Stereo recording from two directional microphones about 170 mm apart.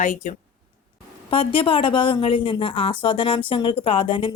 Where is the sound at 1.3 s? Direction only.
30° left (ahead or behind).